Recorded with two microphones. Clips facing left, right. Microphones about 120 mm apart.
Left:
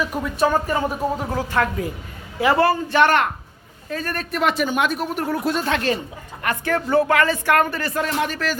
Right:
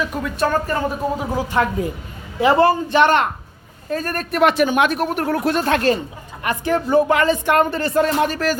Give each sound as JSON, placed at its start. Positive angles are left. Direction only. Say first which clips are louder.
{"t": 0.0, "sound": "speech", "louder": "even", "side_deg": 10}
{"t": 1.2, "sound": "a woman's voice", "louder": "right 2 dB", "side_deg": -10}
{"t": 2.4, "sound": "speech", "louder": "right 3 dB", "side_deg": -25}
{"t": 3.8, "sound": "speech", "louder": "right 4 dB", "side_deg": -45}
{"t": 6.4, "sound": "speech", "louder": "right 3 dB", "side_deg": -20}